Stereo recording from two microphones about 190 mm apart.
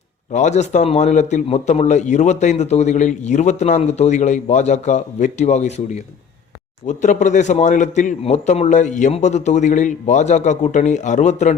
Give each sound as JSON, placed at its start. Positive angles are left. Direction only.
{"t": 0.3, "sound": "a man's voice", "side_deg": 35}